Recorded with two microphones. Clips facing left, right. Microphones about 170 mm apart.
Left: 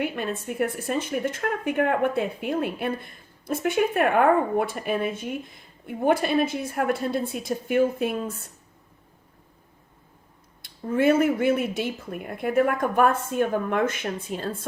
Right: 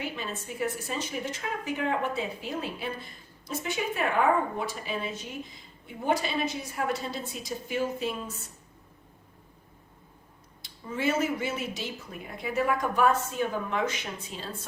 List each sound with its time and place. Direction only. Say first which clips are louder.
0.0 s a woman's voice: left 7 dB; 55° left (ahead or behind)
10.6 s speech: left 9 dB; 55° left (ahead or behind)